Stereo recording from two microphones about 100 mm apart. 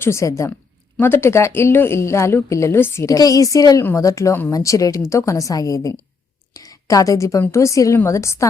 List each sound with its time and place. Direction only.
0.0 s a woman's voice: 30° left (ahead or behind)
6.5 s a sound: 35° left (ahead or behind)
7.5 s a woman's voice: 30° left (ahead or behind)